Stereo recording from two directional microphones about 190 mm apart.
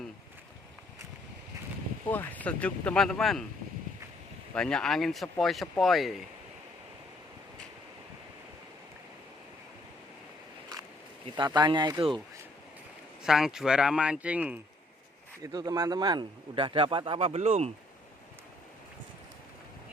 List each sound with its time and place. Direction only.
2.0 s speech: 10° left (ahead or behind)
4.5 s speech: 5° left (ahead or behind)
11.3 s a man's voice: 20° right (ahead or behind)
13.2 s speech: 5° right (ahead or behind)
15.5 s a man's voice: 20° right (ahead or behind)